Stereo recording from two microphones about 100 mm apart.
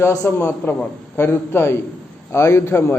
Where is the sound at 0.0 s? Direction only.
30° left (ahead or behind).